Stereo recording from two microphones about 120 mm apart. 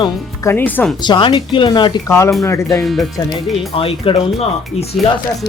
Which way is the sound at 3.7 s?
50° left (ahead or behind).